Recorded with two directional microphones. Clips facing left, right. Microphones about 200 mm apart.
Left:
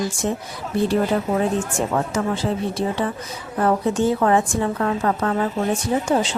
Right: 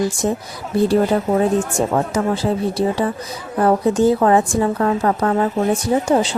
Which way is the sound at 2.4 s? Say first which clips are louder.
Right 4 dB; 35° right (ahead or behind).